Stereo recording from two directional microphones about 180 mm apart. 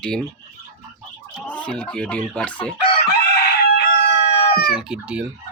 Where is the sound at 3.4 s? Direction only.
65° left (ahead or behind).